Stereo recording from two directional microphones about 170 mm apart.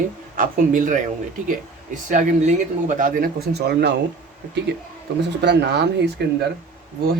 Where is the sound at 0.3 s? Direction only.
50° right (ahead or behind).